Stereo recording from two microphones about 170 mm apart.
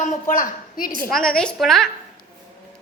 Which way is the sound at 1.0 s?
5° left (ahead or behind).